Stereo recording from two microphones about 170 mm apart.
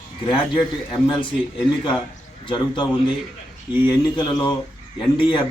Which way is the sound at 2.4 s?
30° left (ahead or behind).